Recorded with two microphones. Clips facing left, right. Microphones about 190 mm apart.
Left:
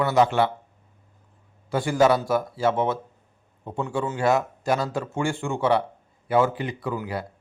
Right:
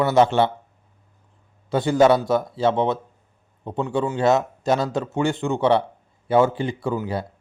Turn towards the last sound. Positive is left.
turn(degrees=-25)  # may be behind; listen again after turning